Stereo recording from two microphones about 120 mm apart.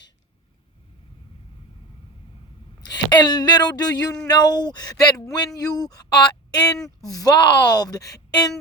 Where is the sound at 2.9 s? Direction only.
35° left (ahead or behind).